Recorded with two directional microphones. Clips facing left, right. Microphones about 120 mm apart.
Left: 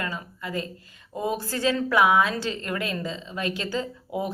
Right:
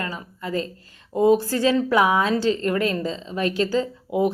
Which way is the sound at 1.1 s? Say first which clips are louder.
Right 10 dB; 25° right (ahead or behind).